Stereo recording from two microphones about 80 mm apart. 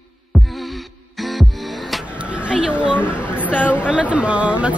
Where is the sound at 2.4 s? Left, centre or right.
Centre.